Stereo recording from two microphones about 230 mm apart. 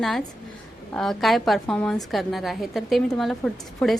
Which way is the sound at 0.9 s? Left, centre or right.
Centre.